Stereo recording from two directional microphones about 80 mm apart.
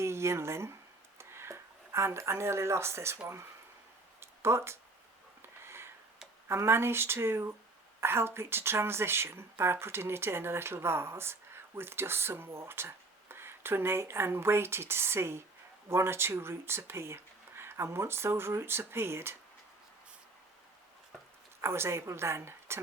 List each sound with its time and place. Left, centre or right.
0.0 s speech: right
4.2 s a sound: right
6.5 s speech: right
21.6 s speech: right